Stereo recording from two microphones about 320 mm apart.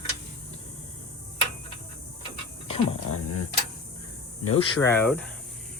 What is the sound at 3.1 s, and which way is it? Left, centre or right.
Speech, left.